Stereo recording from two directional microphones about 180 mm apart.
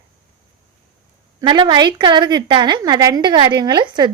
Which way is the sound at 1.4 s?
25° right (ahead or behind).